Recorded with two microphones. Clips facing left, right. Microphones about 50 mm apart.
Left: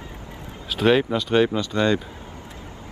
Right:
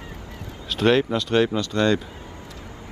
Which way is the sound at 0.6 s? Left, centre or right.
Centre.